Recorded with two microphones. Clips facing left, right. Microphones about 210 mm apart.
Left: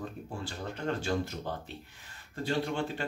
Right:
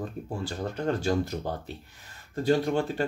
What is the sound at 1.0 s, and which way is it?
Speech, 40° right (ahead or behind).